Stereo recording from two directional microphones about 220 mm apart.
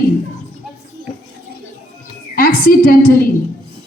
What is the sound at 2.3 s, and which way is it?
Speech, 40° left (ahead or behind).